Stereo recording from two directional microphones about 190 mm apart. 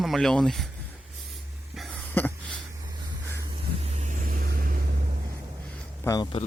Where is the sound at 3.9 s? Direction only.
40° right (ahead or behind).